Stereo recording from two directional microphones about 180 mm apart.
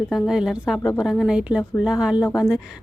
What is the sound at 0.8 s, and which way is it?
Speech, 20° left (ahead or behind).